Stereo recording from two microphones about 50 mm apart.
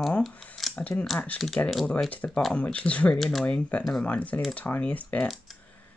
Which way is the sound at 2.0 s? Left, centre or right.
Left.